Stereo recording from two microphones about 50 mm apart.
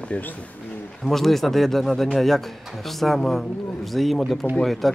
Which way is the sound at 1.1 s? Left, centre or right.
Centre.